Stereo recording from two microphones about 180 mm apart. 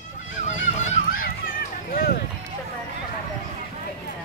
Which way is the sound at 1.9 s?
55° left (ahead or behind).